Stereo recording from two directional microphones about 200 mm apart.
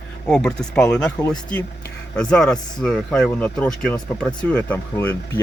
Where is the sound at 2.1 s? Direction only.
5° left (ahead or behind).